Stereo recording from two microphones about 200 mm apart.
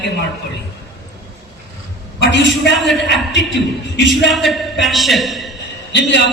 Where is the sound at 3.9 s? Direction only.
60° left (ahead or behind).